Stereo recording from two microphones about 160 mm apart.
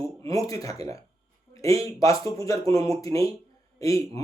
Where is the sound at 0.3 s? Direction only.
20° left (ahead or behind).